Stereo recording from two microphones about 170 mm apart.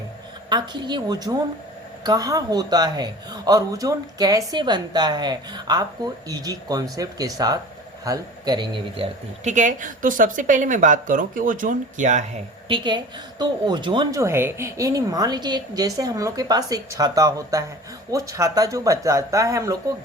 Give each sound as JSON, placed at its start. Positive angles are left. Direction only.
{"t": 0.5, "sound": "speech", "side_deg": -25}
{"t": 9.4, "sound": "speech", "side_deg": -45}
{"t": 12.6, "sound": "a woman's voice", "side_deg": -30}